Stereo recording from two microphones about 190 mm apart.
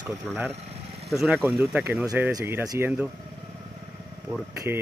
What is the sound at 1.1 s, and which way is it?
Speech, 5° right (ahead or behind).